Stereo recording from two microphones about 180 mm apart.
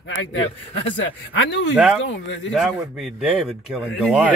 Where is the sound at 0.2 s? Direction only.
90° left.